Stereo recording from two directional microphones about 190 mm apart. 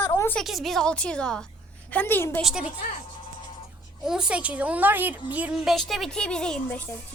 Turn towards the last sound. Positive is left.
turn(degrees=10)  # may be behind; listen again after turning